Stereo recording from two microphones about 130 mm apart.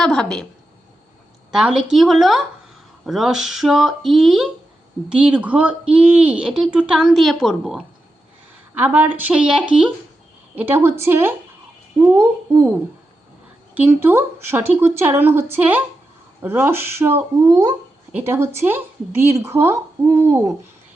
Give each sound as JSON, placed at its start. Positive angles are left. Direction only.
{"t": 0.0, "sound": "speech", "side_deg": 5}
{"t": 1.5, "sound": "speech", "side_deg": -5}
{"t": 8.8, "sound": "a woman's voice", "side_deg": -15}
{"t": 13.7, "sound": "speech", "side_deg": -15}
{"t": 18.1, "sound": "a woman's voice", "side_deg": -15}